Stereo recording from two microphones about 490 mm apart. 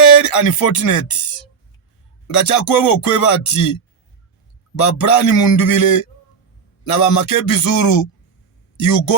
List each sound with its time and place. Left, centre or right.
0.1 s speech: left
2.2 s speech: left
4.8 s speech: left